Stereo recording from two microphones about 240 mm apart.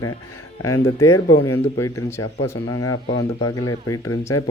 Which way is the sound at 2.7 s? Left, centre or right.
Left.